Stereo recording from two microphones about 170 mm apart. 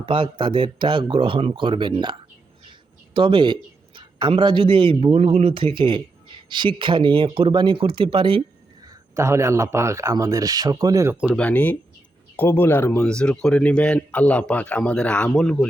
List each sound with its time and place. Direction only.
0.0 s a man's voice: 30° right (ahead or behind)
3.2 s a man's voice: 30° right (ahead or behind)
8.8 s speech: 20° right (ahead or behind)
11.3 s speech: 10° left (ahead or behind)